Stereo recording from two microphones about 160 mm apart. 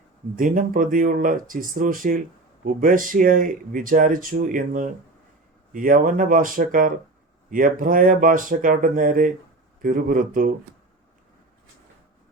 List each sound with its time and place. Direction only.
0.3 s speech: 60° right (ahead or behind)